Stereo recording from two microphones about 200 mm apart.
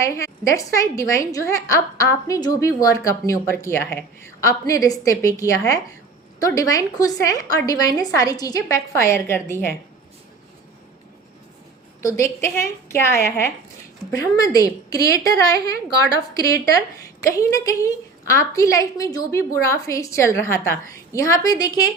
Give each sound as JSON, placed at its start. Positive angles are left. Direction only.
{"t": 0.0, "sound": "a woman's voice", "side_deg": 15}
{"t": 12.0, "sound": "a woman's voice", "side_deg": 15}